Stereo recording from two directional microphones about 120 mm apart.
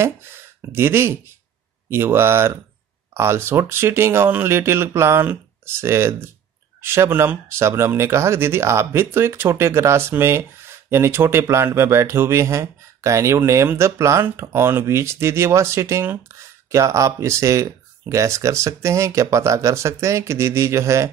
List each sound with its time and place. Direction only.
0.0 s speech: 20° right (ahead or behind)